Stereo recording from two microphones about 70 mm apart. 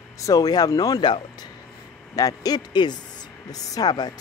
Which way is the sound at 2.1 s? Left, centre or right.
Left.